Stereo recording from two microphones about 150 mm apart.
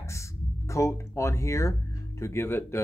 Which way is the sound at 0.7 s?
20° left (ahead or behind).